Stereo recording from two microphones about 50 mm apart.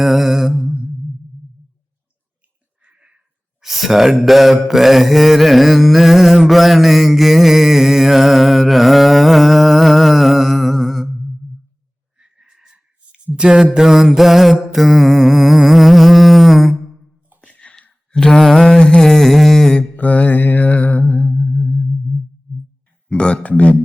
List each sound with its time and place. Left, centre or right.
0.0 s music: centre
2.8 s a sound: right
3.6 s mantra: centre
12.2 s a sound: centre
13.7 s music: centre
17.4 s a sound: left
18.1 s mantra: centre
20.0 s music: left
23.0 s speech: left